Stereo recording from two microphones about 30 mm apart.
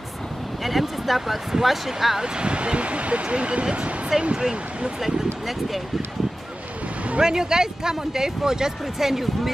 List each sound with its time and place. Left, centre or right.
0.7 s speech: centre
2.1 s speech: right
4.1 s speech: centre
7.2 s speech: right
9.1 s speech: centre